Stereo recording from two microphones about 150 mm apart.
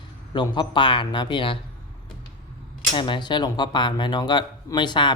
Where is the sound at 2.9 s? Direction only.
35° left (ahead or behind).